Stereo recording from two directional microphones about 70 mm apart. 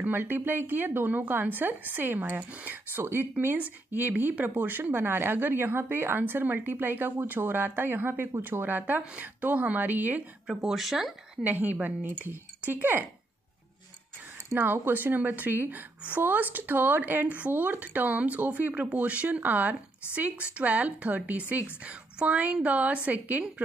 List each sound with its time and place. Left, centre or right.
0.0 s speech: right
10.4 s speech: centre
11.6 s speech: right
14.5 s speech: right